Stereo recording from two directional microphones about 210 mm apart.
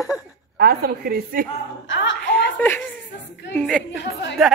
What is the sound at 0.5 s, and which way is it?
Speech, 45° right (ahead or behind).